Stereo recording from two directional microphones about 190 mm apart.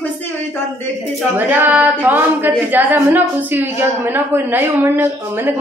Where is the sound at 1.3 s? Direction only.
10° right (ahead or behind).